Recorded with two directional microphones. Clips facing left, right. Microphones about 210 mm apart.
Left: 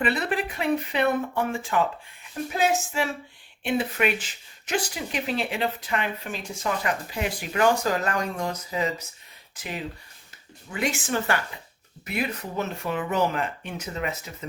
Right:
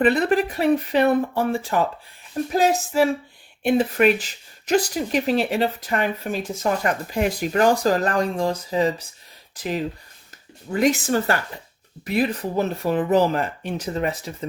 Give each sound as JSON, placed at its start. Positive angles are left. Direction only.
{"t": 0.0, "sound": "speech", "side_deg": -40}
{"t": 10.7, "sound": "speech", "side_deg": -40}